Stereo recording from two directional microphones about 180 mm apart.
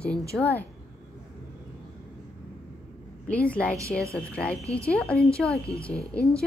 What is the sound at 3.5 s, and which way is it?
A woman's voice, 5° left (ahead or behind).